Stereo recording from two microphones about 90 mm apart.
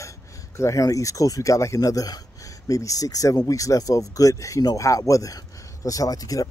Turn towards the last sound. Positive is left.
turn(degrees=40)  # may be behind; listen again after turning